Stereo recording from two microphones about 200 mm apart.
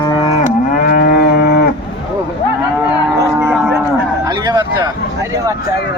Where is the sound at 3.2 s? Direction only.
10° right (ahead or behind).